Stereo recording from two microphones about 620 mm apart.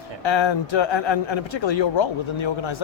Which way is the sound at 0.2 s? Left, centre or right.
Left.